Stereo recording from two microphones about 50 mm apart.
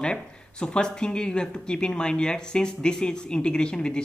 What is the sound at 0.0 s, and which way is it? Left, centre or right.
Speech, centre.